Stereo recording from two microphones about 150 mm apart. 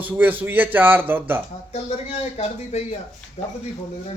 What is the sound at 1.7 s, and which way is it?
Speech, 40° left (ahead or behind).